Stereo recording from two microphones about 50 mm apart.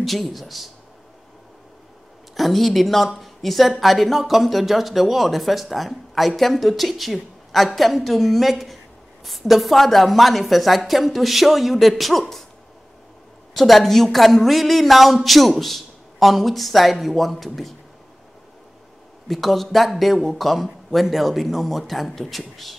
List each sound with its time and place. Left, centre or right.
0.0 s speech: centre
2.3 s a woman's voice: centre
13.6 s speech: centre
19.2 s speech: centre